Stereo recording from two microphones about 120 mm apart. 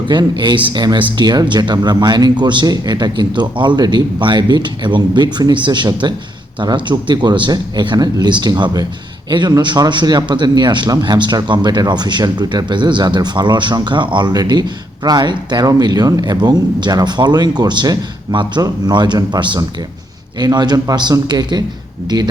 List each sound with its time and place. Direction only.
0.1 s speech: 40° right (ahead or behind)